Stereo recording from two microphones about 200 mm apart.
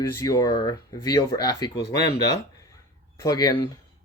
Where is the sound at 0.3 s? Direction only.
20° left (ahead or behind).